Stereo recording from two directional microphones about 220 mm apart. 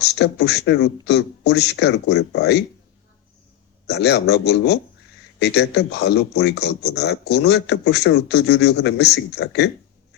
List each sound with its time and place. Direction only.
0.0 s speech: 50° left (ahead or behind)
3.8 s speech: 50° left (ahead or behind)